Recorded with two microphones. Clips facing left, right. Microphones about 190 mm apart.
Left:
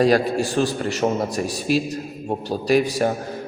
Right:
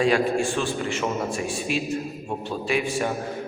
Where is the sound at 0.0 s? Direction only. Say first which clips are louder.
Left 3 dB; 40° left (ahead or behind).